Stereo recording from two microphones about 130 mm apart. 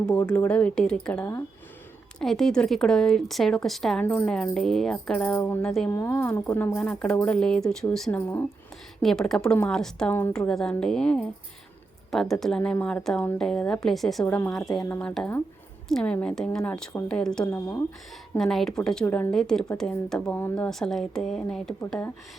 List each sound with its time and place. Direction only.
0.3 s a woman's voice: 10° left (ahead or behind)
4.0 s speech: 15° left (ahead or behind)
4.3 s a woman's voice: 5° left (ahead or behind)
5.6 s a woman's voice: 5° left (ahead or behind)
5.9 s a woman's voice: 20° left (ahead or behind); by 14.3 s centre (ahead or behind)
14.3 s speech: 15° left (ahead or behind)
14.5 s a woman's voice: 5° left (ahead or behind)
14.8 s a woman's voice: 15° left (ahead or behind)
18.3 s a woman's voice: centre (ahead or behind)